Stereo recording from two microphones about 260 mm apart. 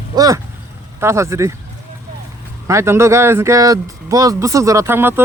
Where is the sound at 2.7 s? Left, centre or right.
Centre.